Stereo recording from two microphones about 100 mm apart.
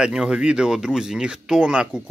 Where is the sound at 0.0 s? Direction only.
10° right (ahead or behind).